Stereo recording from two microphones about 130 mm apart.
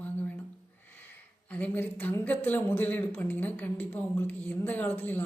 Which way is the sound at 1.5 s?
10° left (ahead or behind).